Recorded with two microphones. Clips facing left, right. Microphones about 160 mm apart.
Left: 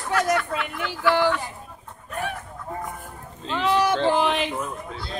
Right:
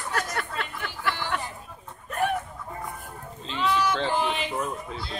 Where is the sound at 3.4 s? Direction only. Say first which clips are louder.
Left 4 dB; 65° left (ahead or behind).